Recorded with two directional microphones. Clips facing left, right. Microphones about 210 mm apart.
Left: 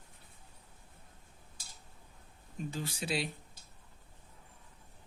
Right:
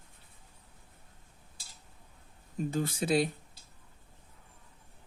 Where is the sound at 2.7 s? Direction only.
50° right (ahead or behind).